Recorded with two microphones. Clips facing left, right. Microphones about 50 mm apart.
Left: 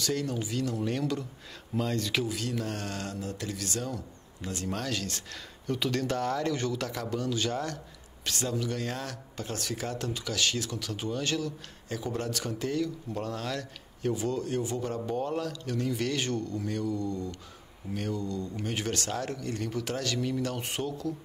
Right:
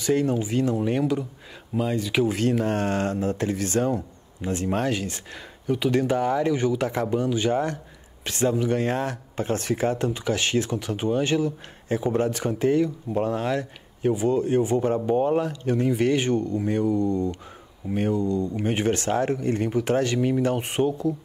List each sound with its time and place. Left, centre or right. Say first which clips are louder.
0.0 s speech: right 9 dB; right
2.2 s speech: right 10 dB; right